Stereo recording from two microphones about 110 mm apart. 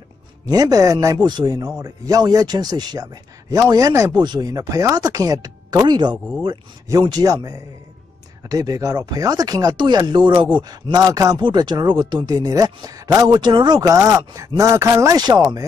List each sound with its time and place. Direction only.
0.5 s speech: 35° right (ahead or behind)
4.2 s speech: 40° right (ahead or behind)
8.5 s speech: 35° right (ahead or behind)